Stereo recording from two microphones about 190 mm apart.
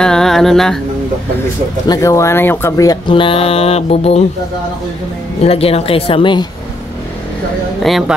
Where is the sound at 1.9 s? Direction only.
15° left (ahead or behind); by 4.2 s 35° left (ahead or behind).